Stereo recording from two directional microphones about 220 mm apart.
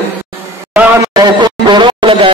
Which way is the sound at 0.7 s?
15° right (ahead or behind).